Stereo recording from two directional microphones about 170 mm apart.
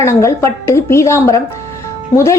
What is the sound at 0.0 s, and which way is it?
A woman's voice, 15° left (ahead or behind).